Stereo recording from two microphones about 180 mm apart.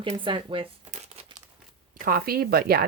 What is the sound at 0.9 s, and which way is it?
Crumpling, 30° right (ahead or behind).